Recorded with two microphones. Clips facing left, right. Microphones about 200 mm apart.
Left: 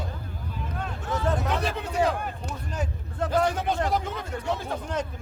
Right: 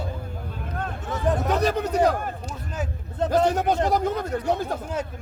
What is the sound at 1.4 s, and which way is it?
Speech, 40° right (ahead or behind).